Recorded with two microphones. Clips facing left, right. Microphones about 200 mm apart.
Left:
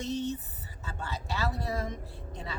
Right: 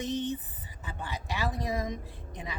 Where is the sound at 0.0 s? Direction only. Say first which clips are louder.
Right 1 dB; 15° right (ahead or behind).